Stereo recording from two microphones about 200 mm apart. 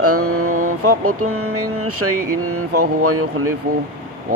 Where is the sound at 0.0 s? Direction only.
90° right.